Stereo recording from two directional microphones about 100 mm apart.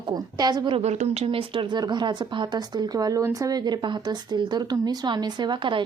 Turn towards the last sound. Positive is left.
turn(degrees=-50)  # may be behind; listen again after turning